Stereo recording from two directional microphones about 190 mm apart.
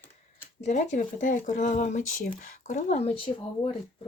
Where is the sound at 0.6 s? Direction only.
40° left (ahead or behind).